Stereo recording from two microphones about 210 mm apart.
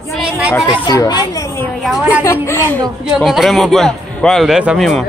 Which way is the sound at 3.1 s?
Centre (ahead or behind).